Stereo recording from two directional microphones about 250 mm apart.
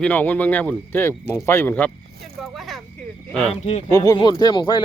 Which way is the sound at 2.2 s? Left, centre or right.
Centre.